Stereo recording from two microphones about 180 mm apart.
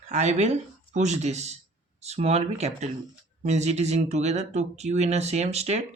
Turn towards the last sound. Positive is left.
turn(degrees=-35)  # may be behind; listen again after turning